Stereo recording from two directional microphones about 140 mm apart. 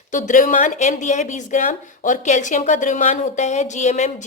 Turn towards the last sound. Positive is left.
turn(degrees=55)  # may be behind; listen again after turning